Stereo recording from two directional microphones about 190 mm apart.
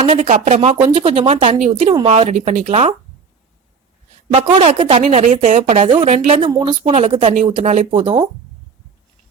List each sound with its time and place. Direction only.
0.0 s speech: 35° right (ahead or behind)
4.3 s speech: 30° right (ahead or behind)
5.9 s a woman's voice: 25° right (ahead or behind)